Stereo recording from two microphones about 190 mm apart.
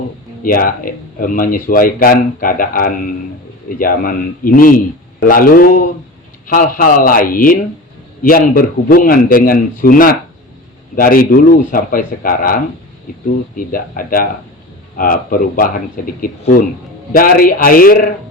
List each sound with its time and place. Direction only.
0.4 s speech: 45° left (ahead or behind)
13.6 s speech: 45° left (ahead or behind)